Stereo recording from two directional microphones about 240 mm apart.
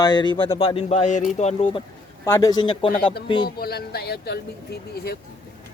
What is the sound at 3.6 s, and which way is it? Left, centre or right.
Speech, left.